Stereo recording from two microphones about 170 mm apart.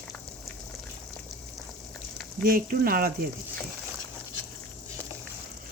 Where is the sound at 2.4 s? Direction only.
60° right (ahead or behind).